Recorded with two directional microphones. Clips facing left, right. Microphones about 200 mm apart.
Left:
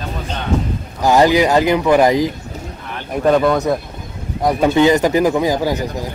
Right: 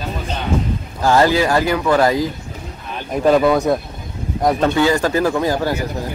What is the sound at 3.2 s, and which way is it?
Speech, 5° right (ahead or behind).